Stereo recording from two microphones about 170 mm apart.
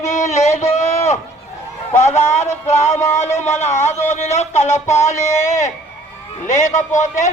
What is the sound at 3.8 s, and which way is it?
Speech, 40° left (ahead or behind).